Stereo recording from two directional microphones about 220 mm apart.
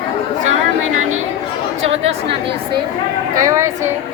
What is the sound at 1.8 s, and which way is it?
Speech, 30° right (ahead or behind).